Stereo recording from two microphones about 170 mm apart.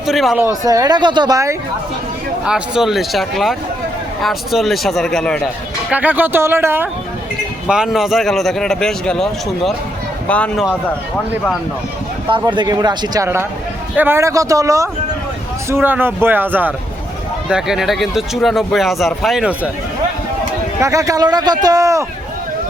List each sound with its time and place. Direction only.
0.1 s speech: centre (ahead or behind)
0.3 s speech: 20° right (ahead or behind)
2.4 s speech: 5° right (ahead or behind)
5.9 s a man's voice: 10° right (ahead or behind)
7.7 s speech: centre (ahead or behind)
12.3 s a man's voice: 25° right (ahead or behind); by 19.7 s 5° right (ahead or behind)
20.8 s speech: 20° right (ahead or behind)